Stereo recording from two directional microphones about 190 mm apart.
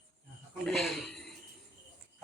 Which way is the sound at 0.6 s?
Centre (ahead or behind).